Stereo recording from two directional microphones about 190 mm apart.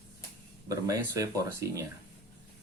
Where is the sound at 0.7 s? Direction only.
15° right (ahead or behind).